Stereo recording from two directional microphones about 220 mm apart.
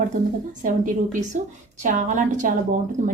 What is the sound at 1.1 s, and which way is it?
A woman's voice, 35° right (ahead or behind).